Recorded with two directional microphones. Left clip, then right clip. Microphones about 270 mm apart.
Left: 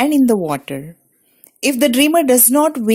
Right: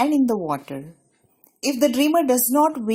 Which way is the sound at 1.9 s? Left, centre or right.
Left.